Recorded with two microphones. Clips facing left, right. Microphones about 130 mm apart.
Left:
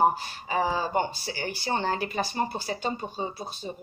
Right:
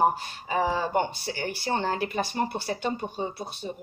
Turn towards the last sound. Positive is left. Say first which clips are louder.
# right 1 dB
turn(degrees=-60)  # may be behind; listen again after turning